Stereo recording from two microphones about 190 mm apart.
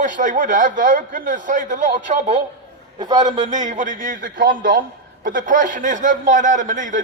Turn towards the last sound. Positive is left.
turn(degrees=-40)  # may be behind; listen again after turning